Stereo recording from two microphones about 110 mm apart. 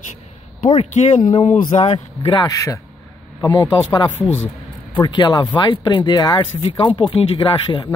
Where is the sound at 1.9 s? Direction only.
45° left (ahead or behind).